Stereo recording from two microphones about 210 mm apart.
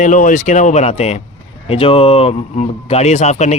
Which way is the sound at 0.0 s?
40° left (ahead or behind).